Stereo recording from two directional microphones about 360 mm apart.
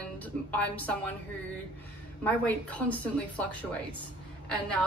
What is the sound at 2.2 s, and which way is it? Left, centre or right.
Speech, centre.